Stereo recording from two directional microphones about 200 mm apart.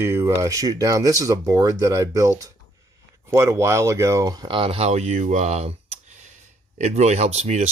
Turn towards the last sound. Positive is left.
turn(degrees=-35)  # may be behind; listen again after turning